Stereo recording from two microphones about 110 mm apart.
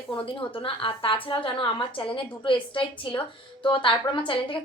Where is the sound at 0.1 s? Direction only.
50° left (ahead or behind).